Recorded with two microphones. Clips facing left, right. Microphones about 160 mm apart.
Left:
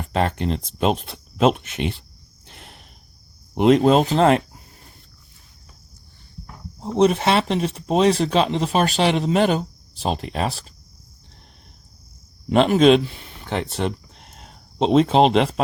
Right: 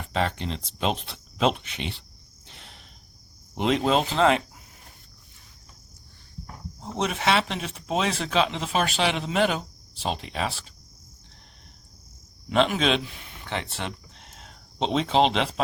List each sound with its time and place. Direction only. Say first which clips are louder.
0.1 s speech: left 5 dB; 50° left (ahead or behind)
2.5 s cricket: left 4 dB; 55° left (ahead or behind)
3.5 s speech: left 8 dB; 50° left (ahead or behind)
6.8 s speech: left 8 dB; 35° left (ahead or behind)
12.5 s speech: left 8 dB; 40° left (ahead or behind)